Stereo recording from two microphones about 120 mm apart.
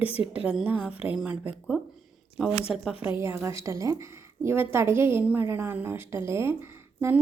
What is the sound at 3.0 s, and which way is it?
A woman's voice, 20° right (ahead or behind).